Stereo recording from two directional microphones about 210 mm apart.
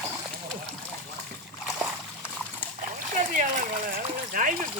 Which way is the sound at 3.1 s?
40° right (ahead or behind).